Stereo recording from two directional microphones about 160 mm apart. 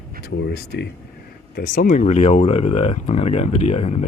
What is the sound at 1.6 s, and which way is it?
Speech, 55° left (ahead or behind).